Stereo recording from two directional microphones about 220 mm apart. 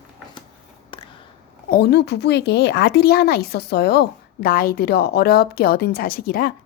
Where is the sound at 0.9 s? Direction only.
20° left (ahead or behind).